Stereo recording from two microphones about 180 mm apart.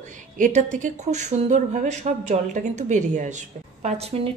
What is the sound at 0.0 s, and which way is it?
Speech, 45° right (ahead or behind).